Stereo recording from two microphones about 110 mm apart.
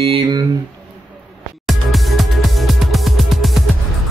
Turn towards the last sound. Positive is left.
turn(degrees=0)  # may be behind; listen again after turning